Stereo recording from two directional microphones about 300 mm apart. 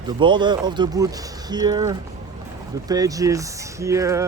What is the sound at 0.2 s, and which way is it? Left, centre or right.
Speech, centre.